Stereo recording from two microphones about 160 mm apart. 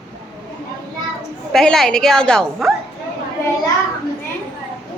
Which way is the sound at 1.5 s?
5° left (ahead or behind).